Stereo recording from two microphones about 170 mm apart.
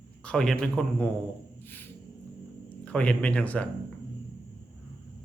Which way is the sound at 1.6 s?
10° left (ahead or behind).